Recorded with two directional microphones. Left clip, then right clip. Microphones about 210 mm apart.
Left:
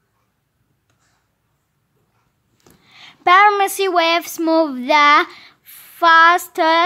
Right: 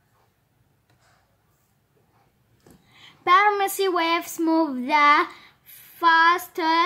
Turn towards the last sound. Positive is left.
turn(degrees=45)  # may be behind; listen again after turning